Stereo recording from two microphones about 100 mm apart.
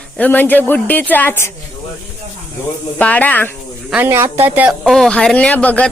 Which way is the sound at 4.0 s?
25° right (ahead or behind).